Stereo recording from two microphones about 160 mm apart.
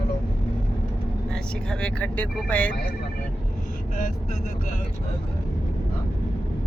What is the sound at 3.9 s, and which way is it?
Speech, 55° left (ahead or behind).